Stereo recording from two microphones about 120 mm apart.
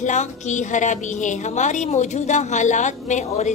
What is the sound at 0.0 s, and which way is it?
A woman's voice, 85° left.